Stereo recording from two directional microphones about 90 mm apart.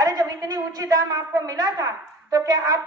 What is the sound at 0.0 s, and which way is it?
A woman's voice, 45° right (ahead or behind).